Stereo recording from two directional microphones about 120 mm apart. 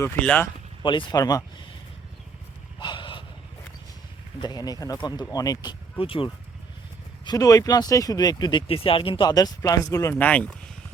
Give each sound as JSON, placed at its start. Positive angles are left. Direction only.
{"t": 0.2, "sound": "speech", "side_deg": 10}
{"t": 0.8, "sound": "speech", "side_deg": 40}
{"t": 1.2, "sound": "speech", "side_deg": 30}
{"t": 2.7, "sound": "a sound", "side_deg": 40}
{"t": 4.4, "sound": "speech", "side_deg": 35}
{"t": 6.0, "sound": "speech", "side_deg": 50}
{"t": 7.3, "sound": "speech", "side_deg": 30}
{"t": 8.6, "sound": "speech", "side_deg": 50}
{"t": 9.3, "sound": "speech", "side_deg": 30}